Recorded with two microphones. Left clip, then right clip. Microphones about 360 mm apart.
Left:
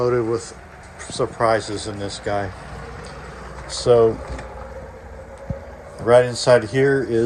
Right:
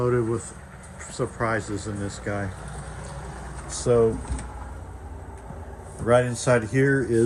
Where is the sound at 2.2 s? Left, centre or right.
Left.